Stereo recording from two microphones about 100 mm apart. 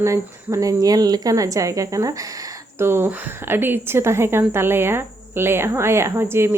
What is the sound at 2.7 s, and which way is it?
A woman's voice, 25° right (ahead or behind).